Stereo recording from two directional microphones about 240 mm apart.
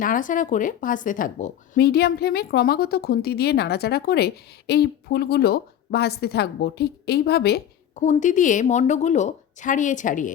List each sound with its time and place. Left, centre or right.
0.0 s speech: left
8.0 s speech: left